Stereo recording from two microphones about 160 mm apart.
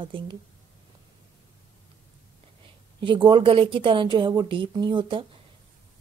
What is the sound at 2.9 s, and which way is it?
A woman's voice, 30° right (ahead or behind).